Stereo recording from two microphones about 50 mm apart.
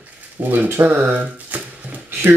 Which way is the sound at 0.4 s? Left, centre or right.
Right.